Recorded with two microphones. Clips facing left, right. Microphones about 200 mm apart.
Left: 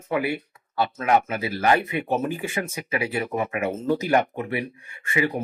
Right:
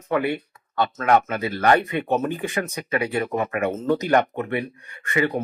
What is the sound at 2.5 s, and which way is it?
Speech, 25° left (ahead or behind).